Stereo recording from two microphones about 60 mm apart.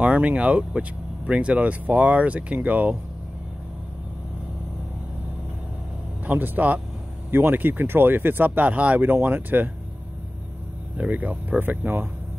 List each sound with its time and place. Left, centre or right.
0.0 s speech: right
6.2 s speech: right
11.0 s speech: right